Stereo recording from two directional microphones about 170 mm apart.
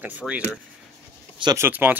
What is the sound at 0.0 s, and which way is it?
Speech, 10° right (ahead or behind).